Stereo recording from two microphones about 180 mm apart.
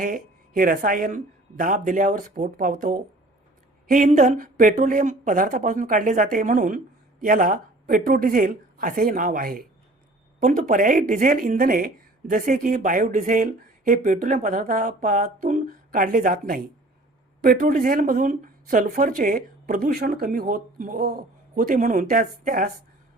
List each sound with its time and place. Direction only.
0.0 s a woman's voice: 50° right (ahead or behind)